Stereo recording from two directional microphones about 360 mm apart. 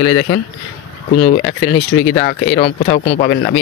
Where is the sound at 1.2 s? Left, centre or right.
Left.